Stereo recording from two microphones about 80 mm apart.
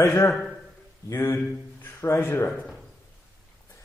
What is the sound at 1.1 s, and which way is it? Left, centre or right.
A man's voice, left.